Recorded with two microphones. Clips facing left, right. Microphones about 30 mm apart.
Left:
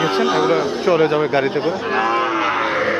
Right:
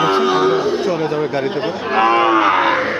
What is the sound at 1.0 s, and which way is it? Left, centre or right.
Speech, left.